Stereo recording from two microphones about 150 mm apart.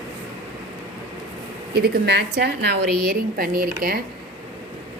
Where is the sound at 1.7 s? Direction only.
90° right; by 3.7 s 75° right (ahead or behind).